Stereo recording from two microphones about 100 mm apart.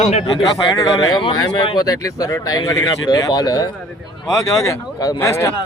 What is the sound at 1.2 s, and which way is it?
Speech, 60° left (ahead or behind).